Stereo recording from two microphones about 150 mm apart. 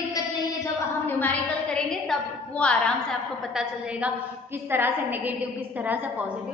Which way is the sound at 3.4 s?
5° right (ahead or behind).